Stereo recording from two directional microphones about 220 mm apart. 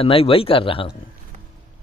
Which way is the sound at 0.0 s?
25° left (ahead or behind).